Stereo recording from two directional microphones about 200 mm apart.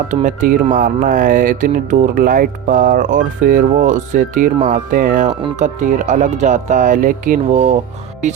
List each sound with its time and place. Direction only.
0.1 s speech: 40° right (ahead or behind)